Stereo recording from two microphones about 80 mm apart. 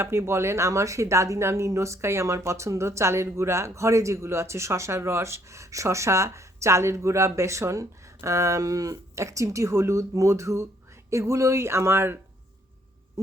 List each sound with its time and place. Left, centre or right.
0.0 s speech: right